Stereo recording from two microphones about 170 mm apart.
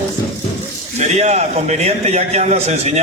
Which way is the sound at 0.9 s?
40° right (ahead or behind).